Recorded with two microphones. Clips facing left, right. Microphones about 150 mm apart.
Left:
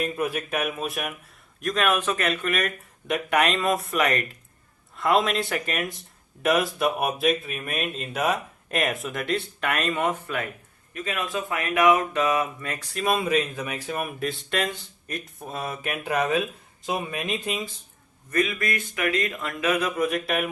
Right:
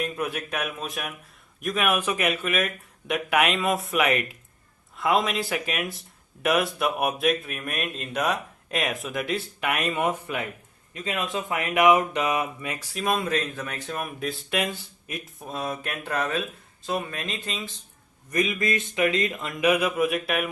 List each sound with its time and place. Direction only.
0.0 s speech: centre (ahead or behind)
1.6 s speech: 5° right (ahead or behind); by 17.7 s 15° left (ahead or behind)
18.3 s speech: 20° right (ahead or behind); by 20.5 s centre (ahead or behind)